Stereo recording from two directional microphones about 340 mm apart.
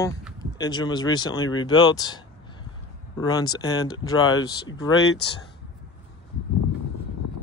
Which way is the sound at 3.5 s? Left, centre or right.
Centre.